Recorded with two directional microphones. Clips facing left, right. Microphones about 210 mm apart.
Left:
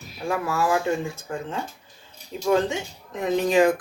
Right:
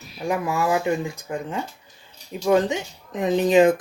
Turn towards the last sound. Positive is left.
turn(degrees=-20)  # may be behind; listen again after turning